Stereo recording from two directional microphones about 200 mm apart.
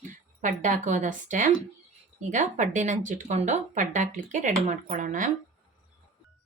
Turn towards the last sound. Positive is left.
turn(degrees=-40)  # may be behind; listen again after turning